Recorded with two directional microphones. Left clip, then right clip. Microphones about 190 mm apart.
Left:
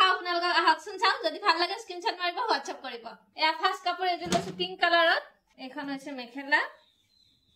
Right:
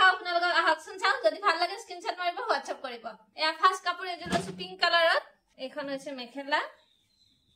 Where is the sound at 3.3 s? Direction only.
30° right (ahead or behind).